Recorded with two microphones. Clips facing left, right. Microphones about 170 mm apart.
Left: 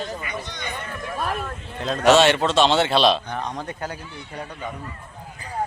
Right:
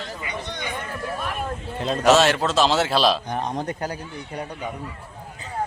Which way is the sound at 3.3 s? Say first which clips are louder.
Right 3 dB; 20° right (ahead or behind).